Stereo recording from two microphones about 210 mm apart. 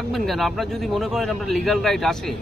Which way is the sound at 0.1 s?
Centre (ahead or behind).